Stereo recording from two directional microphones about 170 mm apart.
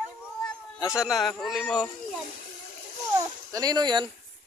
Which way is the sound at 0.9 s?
Centre (ahead or behind).